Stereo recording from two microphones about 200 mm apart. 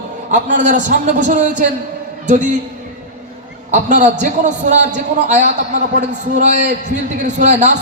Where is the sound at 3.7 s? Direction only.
40° right (ahead or behind).